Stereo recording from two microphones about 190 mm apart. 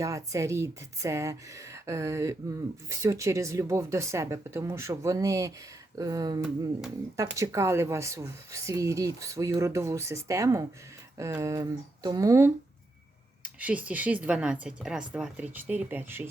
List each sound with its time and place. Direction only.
0.0 s speech: 15° right (ahead or behind)